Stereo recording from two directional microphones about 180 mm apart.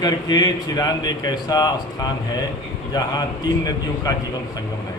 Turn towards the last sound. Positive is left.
turn(degrees=20)  # may be behind; listen again after turning